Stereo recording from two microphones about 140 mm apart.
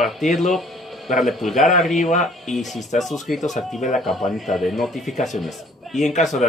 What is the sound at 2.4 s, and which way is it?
Speech, centre (ahead or behind).